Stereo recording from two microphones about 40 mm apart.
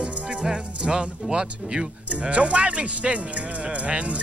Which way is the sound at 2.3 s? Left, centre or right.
Right.